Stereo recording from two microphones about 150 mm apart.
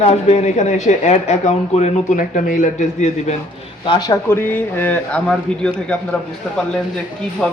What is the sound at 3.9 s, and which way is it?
A man's voice, 25° left (ahead or behind).